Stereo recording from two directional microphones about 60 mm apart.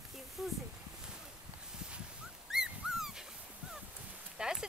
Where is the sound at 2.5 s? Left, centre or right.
Centre.